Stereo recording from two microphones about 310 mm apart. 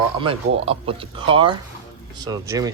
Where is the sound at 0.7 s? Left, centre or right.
Centre.